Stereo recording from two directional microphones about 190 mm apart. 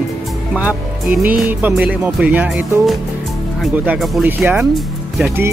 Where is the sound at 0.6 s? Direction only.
10° right (ahead or behind).